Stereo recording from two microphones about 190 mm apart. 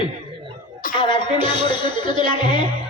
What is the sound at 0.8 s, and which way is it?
Music, 45° left (ahead or behind).